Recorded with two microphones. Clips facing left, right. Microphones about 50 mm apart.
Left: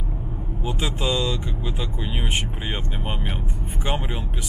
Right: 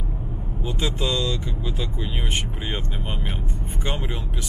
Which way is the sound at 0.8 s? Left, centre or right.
Centre.